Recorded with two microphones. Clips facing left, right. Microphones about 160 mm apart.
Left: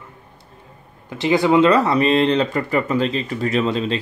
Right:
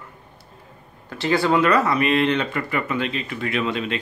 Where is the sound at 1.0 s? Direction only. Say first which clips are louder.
Left 4 dB; 20° left (ahead or behind).